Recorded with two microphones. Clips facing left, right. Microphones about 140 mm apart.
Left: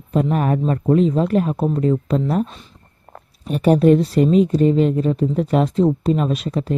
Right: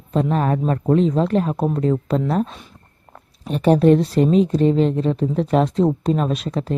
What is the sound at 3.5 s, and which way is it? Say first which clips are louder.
Speech: even; 10° left (ahead or behind).